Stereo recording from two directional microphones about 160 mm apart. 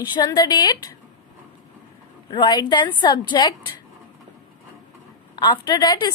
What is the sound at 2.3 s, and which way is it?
A woman's voice, 30° left (ahead or behind).